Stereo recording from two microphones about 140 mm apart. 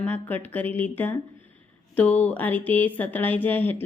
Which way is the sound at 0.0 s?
10° left (ahead or behind).